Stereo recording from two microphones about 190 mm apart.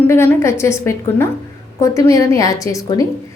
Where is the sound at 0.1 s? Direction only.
15° left (ahead or behind).